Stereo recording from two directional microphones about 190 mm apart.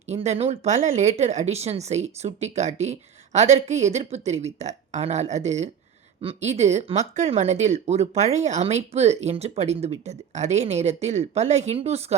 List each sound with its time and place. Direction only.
0.1 s speech: 35° right (ahead or behind)